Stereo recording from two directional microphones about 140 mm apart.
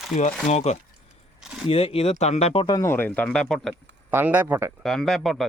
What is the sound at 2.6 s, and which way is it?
Speech, 25° left (ahead or behind).